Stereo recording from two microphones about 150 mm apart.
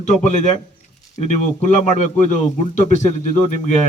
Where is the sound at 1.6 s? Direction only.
55° left (ahead or behind).